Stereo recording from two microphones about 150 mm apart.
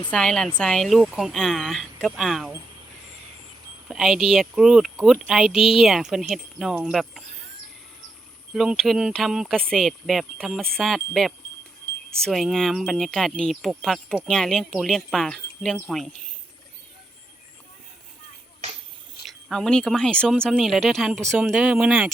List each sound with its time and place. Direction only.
0.1 s speech: 5° left (ahead or behind)
3.8 s speech: centre (ahead or behind)
8.5 s speech: centre (ahead or behind)
19.2 s speech: centre (ahead or behind)